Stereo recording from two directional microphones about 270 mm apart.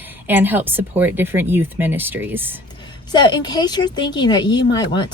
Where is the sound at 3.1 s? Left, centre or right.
Centre.